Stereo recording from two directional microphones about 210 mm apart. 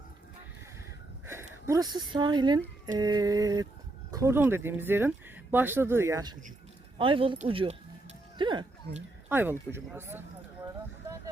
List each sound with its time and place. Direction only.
1.3 s speech: 10° right (ahead or behind)
7.0 s speech: 25° right (ahead or behind)
9.3 s speech: 10° right (ahead or behind)